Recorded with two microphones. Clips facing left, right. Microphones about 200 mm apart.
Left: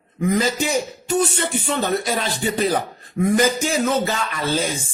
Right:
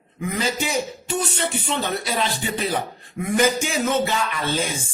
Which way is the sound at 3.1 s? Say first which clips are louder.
Left 2 dB; 35° left (ahead or behind).